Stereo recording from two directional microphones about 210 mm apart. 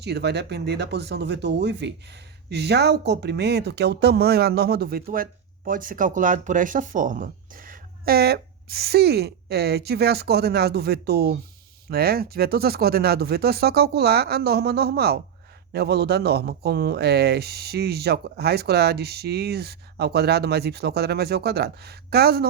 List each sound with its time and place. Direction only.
0.0 s speech: 55° right (ahead or behind)